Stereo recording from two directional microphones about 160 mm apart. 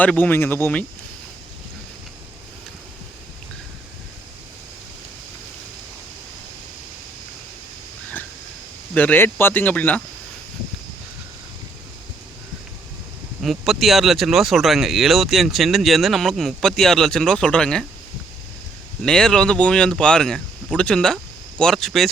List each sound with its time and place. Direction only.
0.0 s speech: 10° left (ahead or behind)
9.0 s speech: 10° left (ahead or behind)
13.4 s speech: centre (ahead or behind)
19.0 s speech: 5° left (ahead or behind)